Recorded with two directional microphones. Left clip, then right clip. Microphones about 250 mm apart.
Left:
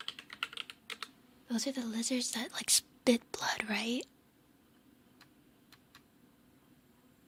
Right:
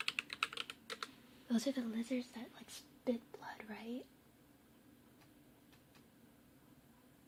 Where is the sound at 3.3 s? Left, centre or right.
Left.